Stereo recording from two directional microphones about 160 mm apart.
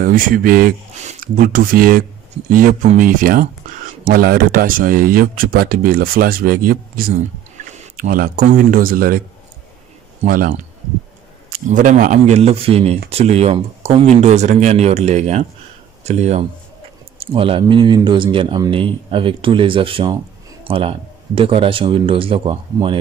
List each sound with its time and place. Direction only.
0.0 s speech: 60° right (ahead or behind)
0.9 s speech: 55° right (ahead or behind)
10.2 s speech: 60° right (ahead or behind)
11.7 s speech: 50° right (ahead or behind); by 22.9 s 30° right (ahead or behind)